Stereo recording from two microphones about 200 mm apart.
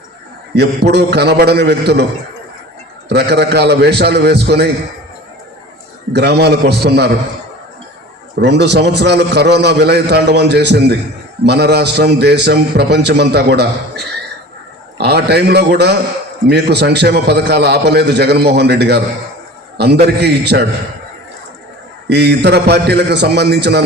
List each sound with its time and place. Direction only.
0.5 s a man's voice: 55° right (ahead or behind)
3.1 s a man's voice: 55° right (ahead or behind)
6.1 s a man's voice: 55° right (ahead or behind)
8.4 s a man's voice: 55° right (ahead or behind)
22.1 s a man's voice: 55° right (ahead or behind)